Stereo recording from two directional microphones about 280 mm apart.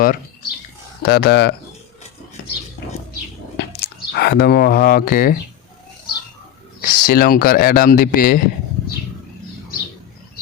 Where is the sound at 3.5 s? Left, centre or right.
Left.